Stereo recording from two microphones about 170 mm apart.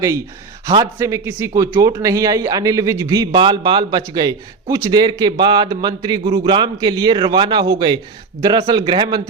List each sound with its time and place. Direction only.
0.7 s speech: 20° right (ahead or behind)